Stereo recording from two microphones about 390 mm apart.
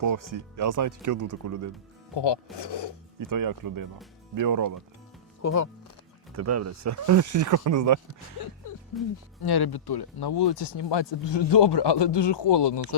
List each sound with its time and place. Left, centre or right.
0.0 s speech: right
2.6 s speech: left
3.2 s speech: right
5.4 s speech: left
6.3 s speech: right
9.4 s speech: left